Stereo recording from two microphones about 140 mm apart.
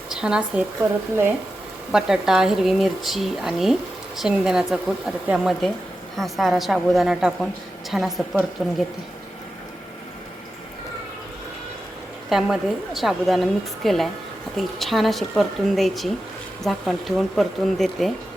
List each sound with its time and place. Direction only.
0.2 s speech: 5° right (ahead or behind)
0.8 s speech: 20° right (ahead or behind)
1.9 s speech: 5° right (ahead or behind)
12.3 s speech: centre (ahead or behind)